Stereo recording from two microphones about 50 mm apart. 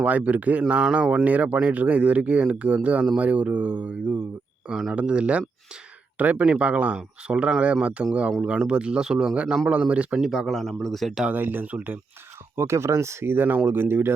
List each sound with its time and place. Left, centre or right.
0.0 s speech: right
4.7 s speech: centre
4.9 s speech: right
10.2 s speech: centre
11.3 s speech: right
12.5 s speech: right
13.3 s speech: right